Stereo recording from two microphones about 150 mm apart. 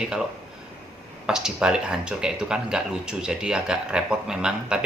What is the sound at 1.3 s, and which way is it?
Speech, 5° right (ahead or behind).